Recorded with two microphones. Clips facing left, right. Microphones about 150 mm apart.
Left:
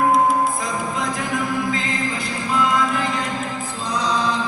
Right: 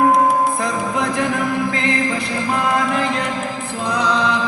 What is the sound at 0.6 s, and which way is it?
Music, 65° right (ahead or behind).